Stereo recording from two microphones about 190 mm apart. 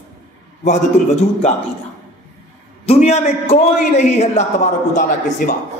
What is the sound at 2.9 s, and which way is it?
A man's voice, 35° left (ahead or behind).